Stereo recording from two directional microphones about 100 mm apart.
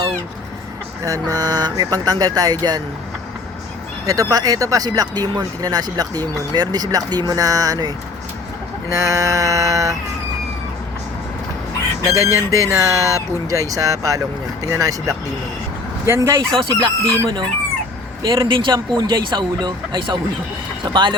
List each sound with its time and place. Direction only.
1.0 s speech: 35° right (ahead or behind)
4.0 s speech: 35° right (ahead or behind)
12.0 s speech: 30° right (ahead or behind)
16.6 s speech: 55° right (ahead or behind)
18.4 s speech: 55° right (ahead or behind)